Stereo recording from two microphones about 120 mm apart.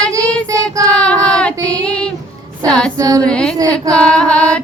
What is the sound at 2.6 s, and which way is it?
Mantra, 5° left (ahead or behind).